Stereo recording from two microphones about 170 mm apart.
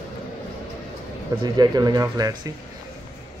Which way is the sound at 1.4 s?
25° right (ahead or behind).